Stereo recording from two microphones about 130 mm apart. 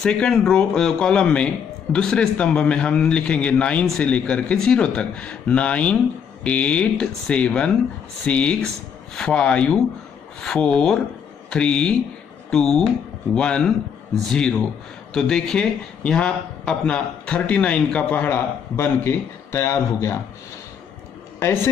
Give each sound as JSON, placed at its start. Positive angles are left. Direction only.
{"t": 0.0, "sound": "a man's voice", "side_deg": 5}
{"t": 15.1, "sound": "a man's voice", "side_deg": 5}
{"t": 21.4, "sound": "speech", "side_deg": 20}